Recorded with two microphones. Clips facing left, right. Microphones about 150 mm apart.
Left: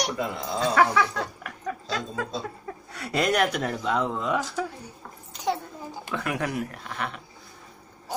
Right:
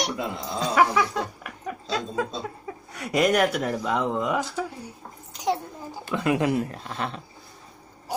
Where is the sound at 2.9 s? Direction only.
10° right (ahead or behind).